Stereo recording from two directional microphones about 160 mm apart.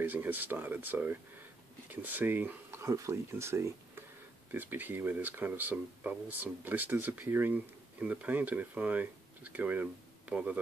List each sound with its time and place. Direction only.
0.0 s speech: 10° right (ahead or behind)